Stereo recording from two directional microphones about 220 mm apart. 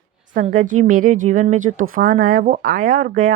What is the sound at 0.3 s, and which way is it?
Speech, 35° right (ahead or behind).